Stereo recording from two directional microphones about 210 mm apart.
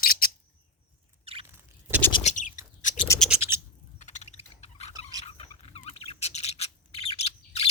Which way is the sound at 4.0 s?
35° left (ahead or behind).